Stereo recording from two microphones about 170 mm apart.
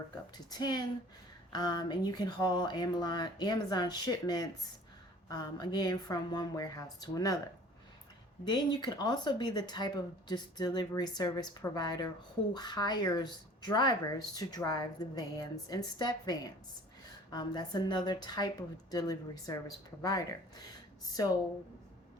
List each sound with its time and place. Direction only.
0.5 s speech: 25° left (ahead or behind)
8.4 s speech: 25° left (ahead or behind)